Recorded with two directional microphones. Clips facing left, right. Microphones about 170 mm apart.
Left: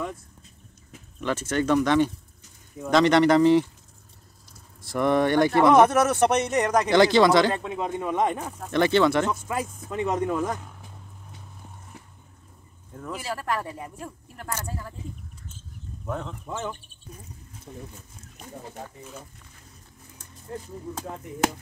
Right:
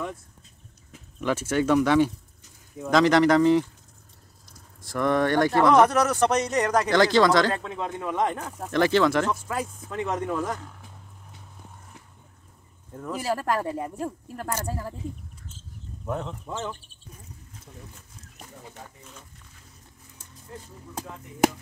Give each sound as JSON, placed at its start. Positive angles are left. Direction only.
{"t": 1.2, "sound": "speech", "side_deg": -10}
{"t": 4.9, "sound": "speech", "side_deg": 10}
{"t": 5.2, "sound": "speech", "side_deg": 20}
{"t": 8.6, "sound": "speech", "side_deg": 0}
{"t": 9.3, "sound": "speech", "side_deg": 15}
{"t": 12.9, "sound": "speech", "side_deg": -5}
{"t": 13.2, "sound": "speech", "side_deg": -40}
{"t": 16.1, "sound": "speech", "side_deg": -5}
{"t": 17.7, "sound": "speech", "side_deg": 20}
{"t": 20.9, "sound": "speech", "side_deg": 40}